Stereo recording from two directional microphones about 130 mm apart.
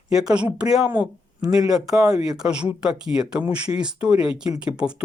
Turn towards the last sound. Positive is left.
turn(degrees=-10)  # may be behind; listen again after turning